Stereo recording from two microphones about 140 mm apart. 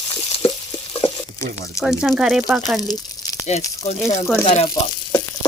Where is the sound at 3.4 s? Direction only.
50° left (ahead or behind).